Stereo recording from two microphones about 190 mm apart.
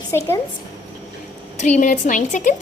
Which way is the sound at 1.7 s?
45° left (ahead or behind).